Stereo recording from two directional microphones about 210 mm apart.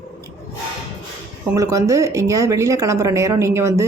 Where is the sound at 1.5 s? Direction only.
15° right (ahead or behind).